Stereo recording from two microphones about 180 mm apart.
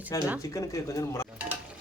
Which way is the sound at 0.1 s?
20° left (ahead or behind).